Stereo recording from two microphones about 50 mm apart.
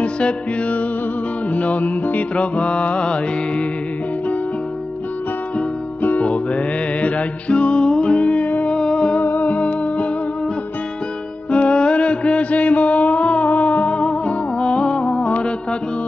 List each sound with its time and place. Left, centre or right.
0.0 s music: left
6.0 s music: left
8.7 s music: left
9.2 s music: left
11.5 s music: left